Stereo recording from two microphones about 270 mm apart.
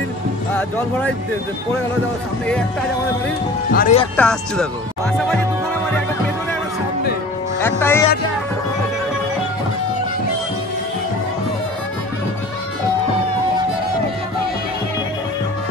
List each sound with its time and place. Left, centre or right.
0.6 s speech: centre
3.7 s speech: left
4.2 s speech: centre
7.6 s music: centre